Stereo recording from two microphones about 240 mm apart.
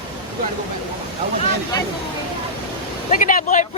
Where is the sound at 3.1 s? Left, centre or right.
Left.